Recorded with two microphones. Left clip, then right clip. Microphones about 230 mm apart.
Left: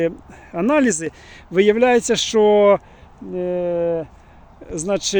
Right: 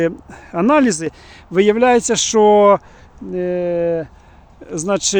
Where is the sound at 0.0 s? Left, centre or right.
Centre.